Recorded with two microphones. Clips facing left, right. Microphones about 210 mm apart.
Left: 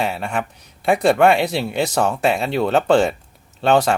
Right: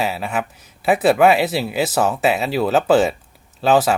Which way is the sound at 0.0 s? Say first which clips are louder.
Even; centre (ahead or behind).